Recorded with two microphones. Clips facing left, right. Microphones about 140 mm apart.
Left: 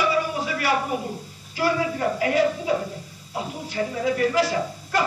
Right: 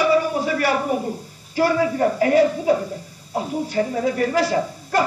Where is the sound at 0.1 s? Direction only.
45° right (ahead or behind).